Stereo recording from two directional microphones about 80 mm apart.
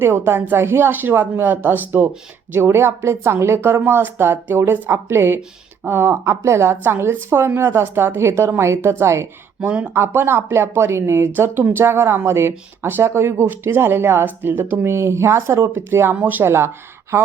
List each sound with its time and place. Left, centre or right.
0.0 s speech: right
9.6 s speech: centre
9.9 s speech: right
16.4 s speech: right